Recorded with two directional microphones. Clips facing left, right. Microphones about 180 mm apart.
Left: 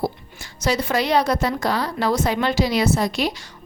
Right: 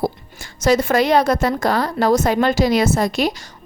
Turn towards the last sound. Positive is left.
turn(degrees=-45)  # may be behind; listen again after turning